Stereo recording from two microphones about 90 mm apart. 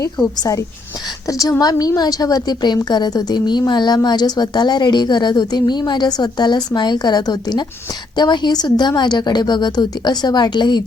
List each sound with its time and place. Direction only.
1.3 s a woman's voice: 40° left (ahead or behind)